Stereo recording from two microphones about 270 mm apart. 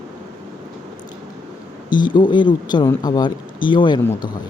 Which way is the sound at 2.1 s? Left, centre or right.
Centre.